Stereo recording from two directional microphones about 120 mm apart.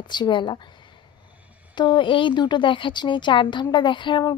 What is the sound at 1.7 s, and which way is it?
Speech, 40° left (ahead or behind).